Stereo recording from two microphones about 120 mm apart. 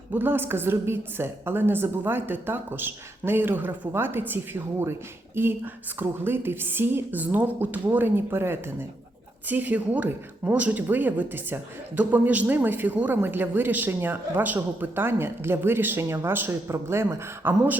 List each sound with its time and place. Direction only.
0.1 s speech: 15° right (ahead or behind)